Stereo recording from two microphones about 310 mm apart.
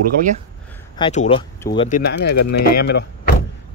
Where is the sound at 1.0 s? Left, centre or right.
Centre.